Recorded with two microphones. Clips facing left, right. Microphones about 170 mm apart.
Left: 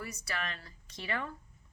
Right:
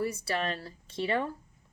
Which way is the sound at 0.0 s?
30° right (ahead or behind).